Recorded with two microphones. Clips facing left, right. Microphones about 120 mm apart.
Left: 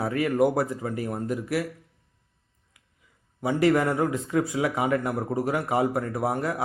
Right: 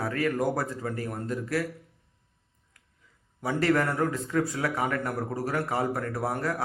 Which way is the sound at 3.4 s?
10° left (ahead or behind).